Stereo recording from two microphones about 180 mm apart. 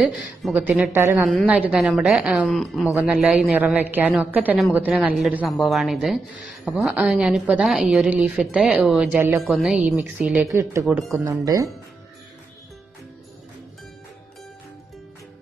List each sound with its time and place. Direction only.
0.0 s a woman's voice: centre (ahead or behind); by 11.7 s 20° right (ahead or behind)